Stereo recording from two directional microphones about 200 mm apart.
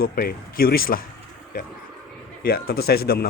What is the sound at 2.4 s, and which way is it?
Speech, 50° left (ahead or behind).